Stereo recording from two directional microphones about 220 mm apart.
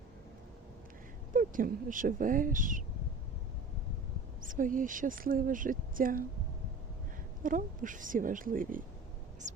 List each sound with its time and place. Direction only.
1.3 s speech: 40° right (ahead or behind)
4.4 s speech: 35° right (ahead or behind)
7.4 s speech: 35° right (ahead or behind)